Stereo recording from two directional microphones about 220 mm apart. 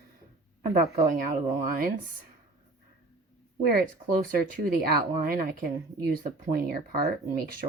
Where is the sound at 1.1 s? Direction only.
40° right (ahead or behind).